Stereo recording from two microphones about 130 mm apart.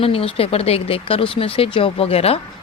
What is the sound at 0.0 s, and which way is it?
Speech, 45° left (ahead or behind).